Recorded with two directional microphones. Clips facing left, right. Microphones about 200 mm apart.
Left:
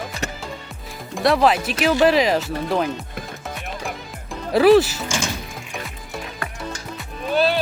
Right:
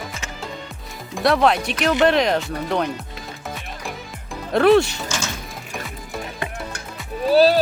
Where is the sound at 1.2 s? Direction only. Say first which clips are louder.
Even; centre (ahead or behind).